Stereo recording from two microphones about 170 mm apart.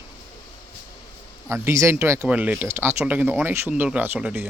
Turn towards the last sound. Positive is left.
turn(degrees=-10)  # may be behind; listen again after turning